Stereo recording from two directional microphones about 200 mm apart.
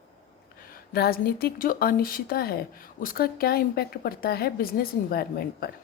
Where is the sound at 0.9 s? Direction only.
50° left (ahead or behind).